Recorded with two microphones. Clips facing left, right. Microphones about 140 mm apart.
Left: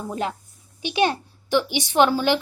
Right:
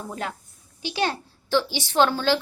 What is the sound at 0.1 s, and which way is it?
A woman's voice, 20° left (ahead or behind).